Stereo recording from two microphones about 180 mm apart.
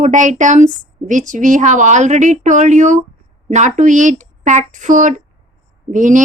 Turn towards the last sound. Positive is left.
turn(degrees=-45)  # may be behind; listen again after turning